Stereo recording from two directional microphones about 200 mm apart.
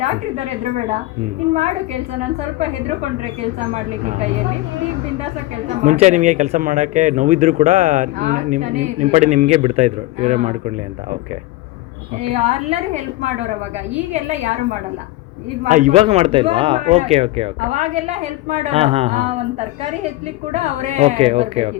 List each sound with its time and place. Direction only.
0.0 s speech: 35° right (ahead or behind)
5.2 s speech: 35° right (ahead or behind)
12.2 s speech: 35° right (ahead or behind)